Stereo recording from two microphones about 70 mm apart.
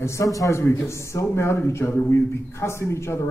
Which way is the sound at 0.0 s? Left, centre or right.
Left.